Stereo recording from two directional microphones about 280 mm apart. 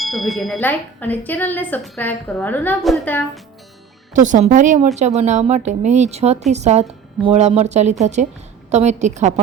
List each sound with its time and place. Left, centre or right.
0.0 s speech: centre
4.1 s a woman's voice: right